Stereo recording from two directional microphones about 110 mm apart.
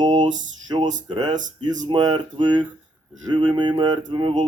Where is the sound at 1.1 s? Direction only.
45° right (ahead or behind).